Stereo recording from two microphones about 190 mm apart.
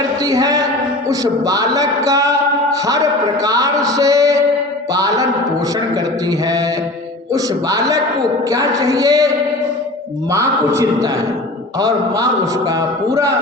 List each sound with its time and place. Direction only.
0.2 s a man's voice: 20° right (ahead or behind)
7.3 s a man's voice: 20° right (ahead or behind)
10.3 s a man's voice: 15° right (ahead or behind)